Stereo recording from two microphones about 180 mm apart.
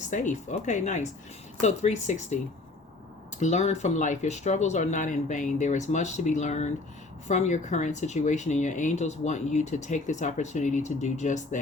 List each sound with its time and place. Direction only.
0.1 s speech: 45° left (ahead or behind)
3.4 s speech: 40° left (ahead or behind)